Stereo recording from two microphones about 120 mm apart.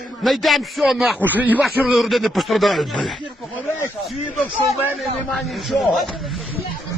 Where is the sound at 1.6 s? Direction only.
5° right (ahead or behind).